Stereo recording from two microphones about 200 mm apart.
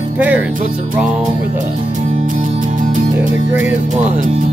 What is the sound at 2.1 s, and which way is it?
Music, 40° right (ahead or behind).